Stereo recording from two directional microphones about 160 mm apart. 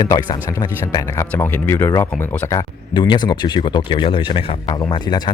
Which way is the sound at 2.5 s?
30° left (ahead or behind).